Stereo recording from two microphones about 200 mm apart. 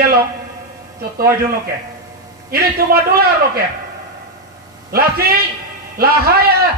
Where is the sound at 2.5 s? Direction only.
50° right (ahead or behind).